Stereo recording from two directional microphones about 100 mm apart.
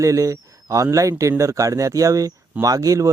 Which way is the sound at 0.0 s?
35° right (ahead or behind).